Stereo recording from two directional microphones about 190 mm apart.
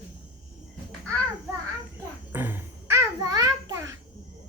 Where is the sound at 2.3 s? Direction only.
10° right (ahead or behind).